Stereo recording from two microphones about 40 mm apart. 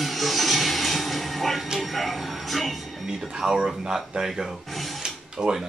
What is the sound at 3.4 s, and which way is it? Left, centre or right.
Speech, centre.